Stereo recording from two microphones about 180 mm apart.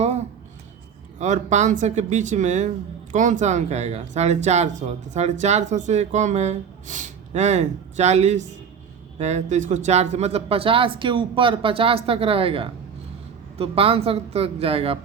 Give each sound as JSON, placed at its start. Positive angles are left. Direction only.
{"t": 1.2, "sound": "speech", "side_deg": -40}